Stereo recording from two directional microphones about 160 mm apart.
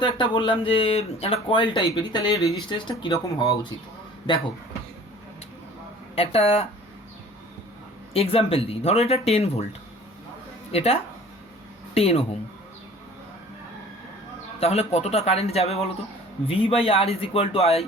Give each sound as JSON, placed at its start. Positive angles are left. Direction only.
{"t": 0.0, "sound": "speech", "side_deg": 30}
{"t": 6.1, "sound": "speech", "side_deg": 35}
{"t": 8.1, "sound": "speech", "side_deg": 35}
{"t": 10.7, "sound": "speech", "side_deg": 40}
{"t": 11.9, "sound": "speech", "side_deg": 40}
{"t": 14.6, "sound": "speech", "side_deg": 40}